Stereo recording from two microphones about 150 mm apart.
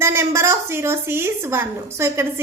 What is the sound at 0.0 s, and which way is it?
A woman's voice, 15° right (ahead or behind).